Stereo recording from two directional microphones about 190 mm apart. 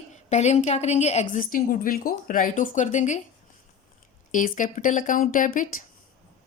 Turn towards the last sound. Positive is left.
turn(degrees=45)  # may be behind; listen again after turning